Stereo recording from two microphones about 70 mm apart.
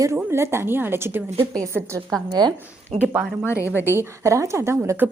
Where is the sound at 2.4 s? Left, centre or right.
Right.